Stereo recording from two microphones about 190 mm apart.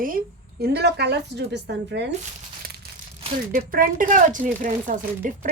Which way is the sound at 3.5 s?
50° right (ahead or behind).